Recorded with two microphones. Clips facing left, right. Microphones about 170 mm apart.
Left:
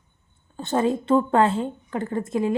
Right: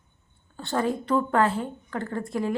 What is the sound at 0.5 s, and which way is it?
A woman's voice, 20° left (ahead or behind).